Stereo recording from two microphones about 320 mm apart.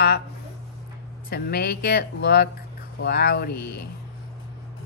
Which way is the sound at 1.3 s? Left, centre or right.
Left.